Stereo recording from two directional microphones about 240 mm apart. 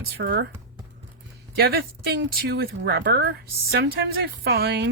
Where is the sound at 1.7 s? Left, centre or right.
Right.